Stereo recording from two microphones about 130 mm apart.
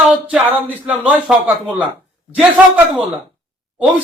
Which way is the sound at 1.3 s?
5° right (ahead or behind).